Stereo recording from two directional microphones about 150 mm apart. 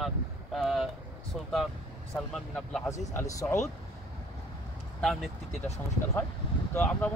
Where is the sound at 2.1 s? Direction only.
5° left (ahead or behind).